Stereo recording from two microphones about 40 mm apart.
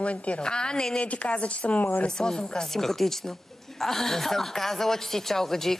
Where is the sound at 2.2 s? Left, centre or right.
Centre.